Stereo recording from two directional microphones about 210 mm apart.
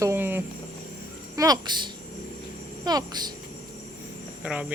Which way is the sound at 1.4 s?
20° right (ahead or behind).